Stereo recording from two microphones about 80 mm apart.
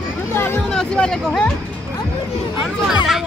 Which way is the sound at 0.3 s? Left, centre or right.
Left.